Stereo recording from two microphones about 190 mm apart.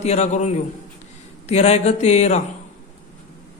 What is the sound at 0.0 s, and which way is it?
A man's voice, 35° left (ahead or behind).